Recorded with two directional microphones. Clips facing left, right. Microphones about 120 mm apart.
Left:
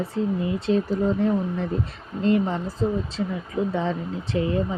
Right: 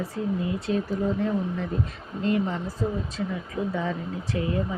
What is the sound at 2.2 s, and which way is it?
Speech, 30° left (ahead or behind).